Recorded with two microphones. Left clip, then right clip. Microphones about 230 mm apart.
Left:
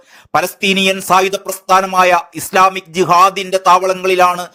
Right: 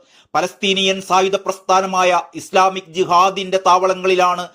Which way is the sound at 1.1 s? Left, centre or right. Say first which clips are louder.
Left 2 dB; left.